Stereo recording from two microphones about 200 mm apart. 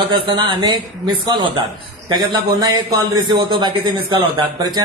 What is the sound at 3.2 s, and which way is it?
Speech, 25° right (ahead or behind).